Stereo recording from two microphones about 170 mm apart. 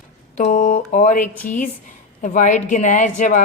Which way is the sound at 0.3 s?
45° left (ahead or behind).